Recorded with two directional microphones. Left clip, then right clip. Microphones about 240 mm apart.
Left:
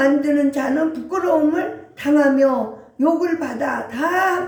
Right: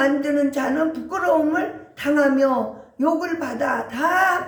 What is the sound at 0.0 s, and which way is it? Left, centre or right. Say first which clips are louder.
Speech: left 3 dB; centre.